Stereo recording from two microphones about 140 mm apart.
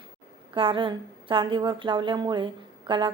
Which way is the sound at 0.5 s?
40° right (ahead or behind).